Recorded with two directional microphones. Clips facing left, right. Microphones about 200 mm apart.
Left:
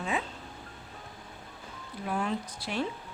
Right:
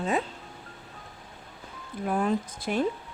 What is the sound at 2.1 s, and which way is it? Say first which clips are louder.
Speech: right 5 dB; 50° right (ahead or behind).